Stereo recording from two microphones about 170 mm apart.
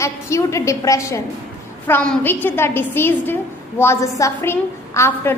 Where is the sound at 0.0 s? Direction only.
15° left (ahead or behind).